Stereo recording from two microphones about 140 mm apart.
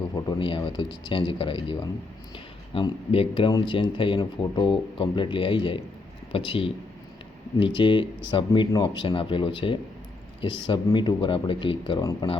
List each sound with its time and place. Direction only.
0.1 s speech: 35° left (ahead or behind)